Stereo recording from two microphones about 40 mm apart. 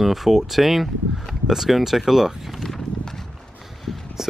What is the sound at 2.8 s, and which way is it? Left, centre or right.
Horse, centre.